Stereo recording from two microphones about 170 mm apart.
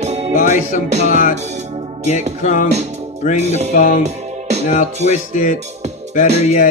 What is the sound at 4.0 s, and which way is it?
Music, 40° right (ahead or behind).